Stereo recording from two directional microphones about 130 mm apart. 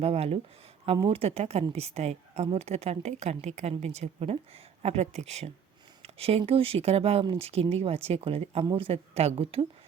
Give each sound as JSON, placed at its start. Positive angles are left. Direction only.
{"t": 0.0, "sound": "speech", "side_deg": -50}